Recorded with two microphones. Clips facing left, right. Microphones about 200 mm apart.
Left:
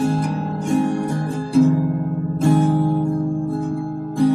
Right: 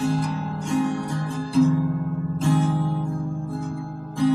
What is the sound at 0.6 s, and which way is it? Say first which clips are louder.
Music: left 4 dB; 50° left (ahead or behind).